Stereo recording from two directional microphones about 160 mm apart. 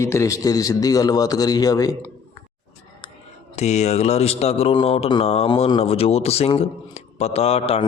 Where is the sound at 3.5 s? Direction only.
45° left (ahead or behind).